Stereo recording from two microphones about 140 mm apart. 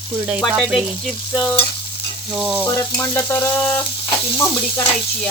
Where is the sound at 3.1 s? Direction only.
20° left (ahead or behind).